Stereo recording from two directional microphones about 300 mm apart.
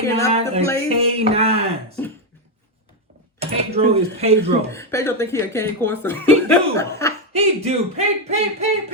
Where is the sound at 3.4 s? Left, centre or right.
Centre.